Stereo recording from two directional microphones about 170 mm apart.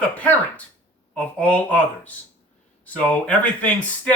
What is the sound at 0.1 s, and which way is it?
Speech, 10° left (ahead or behind).